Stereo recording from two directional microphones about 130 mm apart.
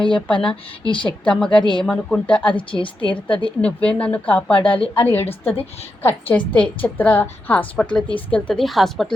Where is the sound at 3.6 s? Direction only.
10° left (ahead or behind).